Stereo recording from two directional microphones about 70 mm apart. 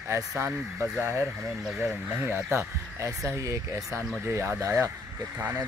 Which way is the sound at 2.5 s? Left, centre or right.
Right.